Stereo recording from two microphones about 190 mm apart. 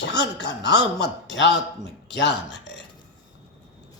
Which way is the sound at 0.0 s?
65° left (ahead or behind).